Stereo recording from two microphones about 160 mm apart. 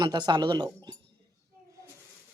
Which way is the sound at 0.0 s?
25° right (ahead or behind).